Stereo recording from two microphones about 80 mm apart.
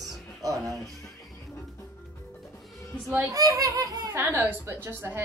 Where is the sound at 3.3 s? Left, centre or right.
Right.